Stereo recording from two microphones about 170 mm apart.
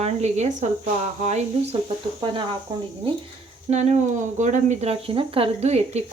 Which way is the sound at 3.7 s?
40° right (ahead or behind).